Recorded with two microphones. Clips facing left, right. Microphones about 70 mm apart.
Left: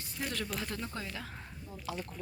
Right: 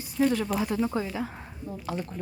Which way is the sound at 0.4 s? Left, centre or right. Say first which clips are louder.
Right 11 dB; centre.